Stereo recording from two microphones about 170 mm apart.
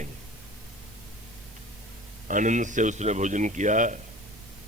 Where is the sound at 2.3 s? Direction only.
45° right (ahead or behind).